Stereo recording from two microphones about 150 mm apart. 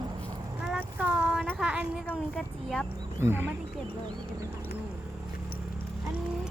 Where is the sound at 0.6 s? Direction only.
5° right (ahead or behind).